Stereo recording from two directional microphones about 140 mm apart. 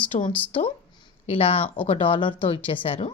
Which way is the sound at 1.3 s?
45° left (ahead or behind).